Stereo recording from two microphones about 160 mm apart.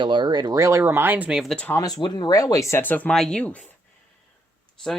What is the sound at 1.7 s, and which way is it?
Speech, 25° left (ahead or behind).